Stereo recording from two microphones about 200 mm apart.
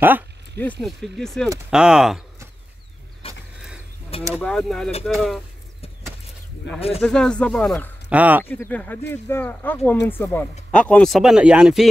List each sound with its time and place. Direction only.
0.6 s speech: 5° left (ahead or behind)
3.2 s mechanisms: 30° left (ahead or behind)
4.3 s speech: 5° left (ahead or behind)
6.7 s speech: 60° left (ahead or behind)
7.0 s speech: 5° left (ahead or behind)
8.1 s speech: 10° right (ahead or behind)
8.5 s speech: 10° left (ahead or behind)